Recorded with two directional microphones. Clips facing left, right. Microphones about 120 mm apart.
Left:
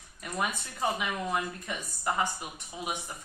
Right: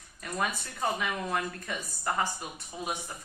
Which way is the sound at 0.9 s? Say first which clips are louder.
Even; 15° left (ahead or behind).